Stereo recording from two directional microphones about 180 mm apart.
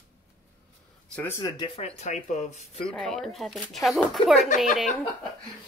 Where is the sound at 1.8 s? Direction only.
35° left (ahead or behind).